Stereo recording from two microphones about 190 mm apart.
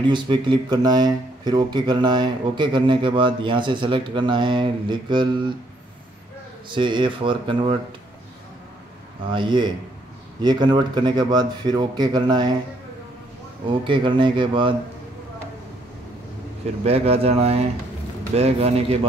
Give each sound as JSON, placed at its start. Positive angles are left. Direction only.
{"t": 0.1, "sound": "speech", "side_deg": -25}
{"t": 6.7, "sound": "speech", "side_deg": -25}
{"t": 9.3, "sound": "speech", "side_deg": -25}
{"t": 13.7, "sound": "speech", "side_deg": -25}
{"t": 16.8, "sound": "speech", "side_deg": -30}